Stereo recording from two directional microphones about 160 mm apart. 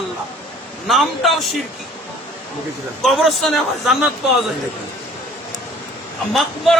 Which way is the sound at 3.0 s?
Centre (ahead or behind).